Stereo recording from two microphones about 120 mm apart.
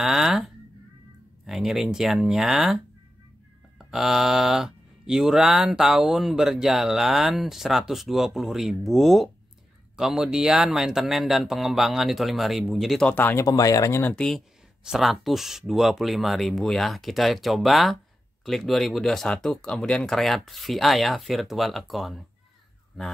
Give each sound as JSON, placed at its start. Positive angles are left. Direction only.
{"t": 0.0, "sound": "a sound", "side_deg": -5}
{"t": 1.4, "sound": "speech", "side_deg": -5}
{"t": 13.1, "sound": "speech", "side_deg": 15}
{"t": 13.5, "sound": "speech", "side_deg": 30}
{"t": 14.1, "sound": "speech", "side_deg": 5}